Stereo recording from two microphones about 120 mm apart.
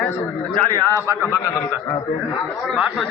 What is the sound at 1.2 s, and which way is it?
Speech, 20° left (ahead or behind).